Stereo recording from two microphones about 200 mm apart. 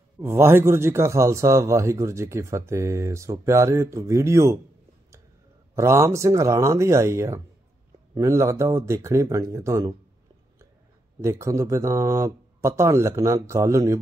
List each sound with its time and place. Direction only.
0.2 s speech: 10° right (ahead or behind)
5.8 s speech: 15° right (ahead or behind)
11.1 s speech: 15° right (ahead or behind)